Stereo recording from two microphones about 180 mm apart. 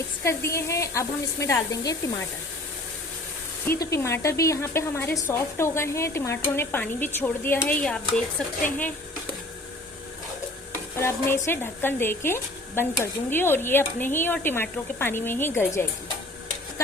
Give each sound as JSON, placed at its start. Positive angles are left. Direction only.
{"t": 0.3, "sound": "speech", "side_deg": 15}
{"t": 3.7, "sound": "speech", "side_deg": 15}
{"t": 10.9, "sound": "speech", "side_deg": 15}